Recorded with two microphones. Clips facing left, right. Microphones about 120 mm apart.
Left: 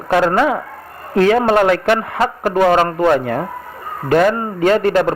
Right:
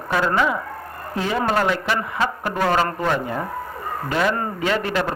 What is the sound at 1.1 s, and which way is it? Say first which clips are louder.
Speech: left 12 dB; 85° left.